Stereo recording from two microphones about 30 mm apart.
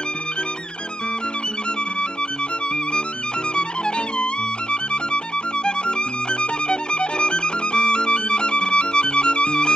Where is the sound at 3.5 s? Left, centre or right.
Left.